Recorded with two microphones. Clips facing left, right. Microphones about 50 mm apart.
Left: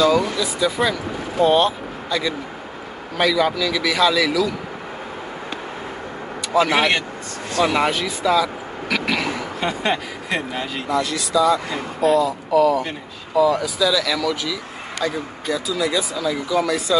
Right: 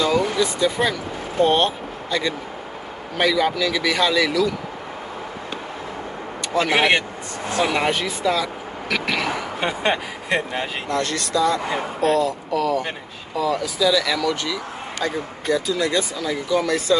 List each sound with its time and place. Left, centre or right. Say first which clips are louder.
0.0 s speech: left 2 dB; centre
6.5 s speech: left 1 dB; centre
9.6 s speech: even; centre
10.9 s speech: left 3 dB; centre